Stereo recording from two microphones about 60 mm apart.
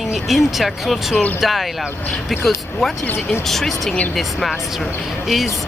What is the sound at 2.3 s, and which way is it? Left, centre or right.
Speech, centre.